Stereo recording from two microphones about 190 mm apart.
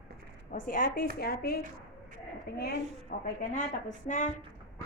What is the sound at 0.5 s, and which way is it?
A woman's voice, 45° left (ahead or behind).